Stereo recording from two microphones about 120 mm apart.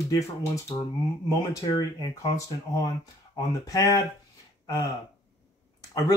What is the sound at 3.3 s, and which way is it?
Speech, 30° left (ahead or behind).